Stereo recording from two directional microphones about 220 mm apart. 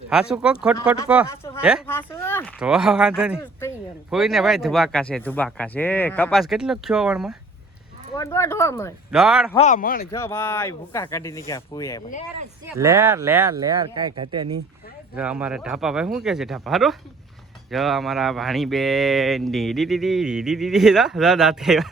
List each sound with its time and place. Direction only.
0.1 s speech: 5° right (ahead or behind)
1.9 s speech: 10° left (ahead or behind)
2.6 s speech: 5° right (ahead or behind)
8.1 s speech: 15° left (ahead or behind)
9.1 s speech: centre (ahead or behind)
9.6 s speech: 35° left (ahead or behind)
10.1 s speech: 10° left (ahead or behind)
12.6 s speech: 15° right (ahead or behind)
15.1 s speech: 5° right (ahead or behind)